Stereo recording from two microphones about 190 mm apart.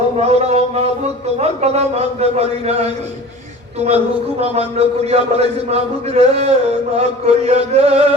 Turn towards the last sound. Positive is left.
turn(degrees=-35)  # may be behind; listen again after turning